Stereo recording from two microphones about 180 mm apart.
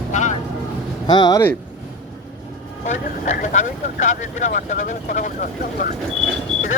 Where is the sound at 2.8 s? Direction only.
45° left (ahead or behind).